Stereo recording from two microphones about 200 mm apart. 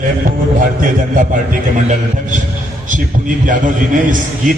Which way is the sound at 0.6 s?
45° right (ahead or behind).